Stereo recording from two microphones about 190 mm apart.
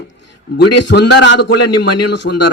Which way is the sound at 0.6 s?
65° left (ahead or behind).